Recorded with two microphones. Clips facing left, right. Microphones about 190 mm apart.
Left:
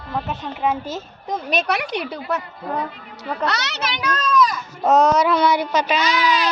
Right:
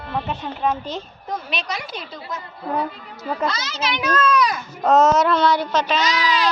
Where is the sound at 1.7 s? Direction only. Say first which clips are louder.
Left 7 dB; 70° left (ahead or behind).